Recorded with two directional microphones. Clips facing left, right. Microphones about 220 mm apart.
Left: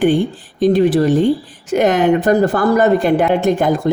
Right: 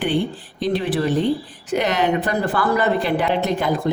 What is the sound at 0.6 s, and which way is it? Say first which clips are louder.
A woman's voice: left 9 dB; 45° left (ahead or behind).